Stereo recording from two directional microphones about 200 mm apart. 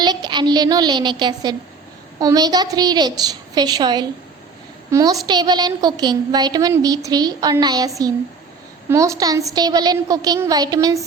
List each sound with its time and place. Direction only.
0.0 s a woman's voice: 20° right (ahead or behind)